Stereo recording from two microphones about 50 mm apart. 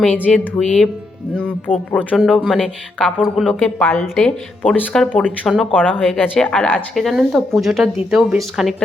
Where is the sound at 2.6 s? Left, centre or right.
Centre.